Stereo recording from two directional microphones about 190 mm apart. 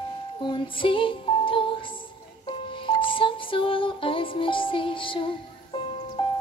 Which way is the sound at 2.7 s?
25° left (ahead or behind).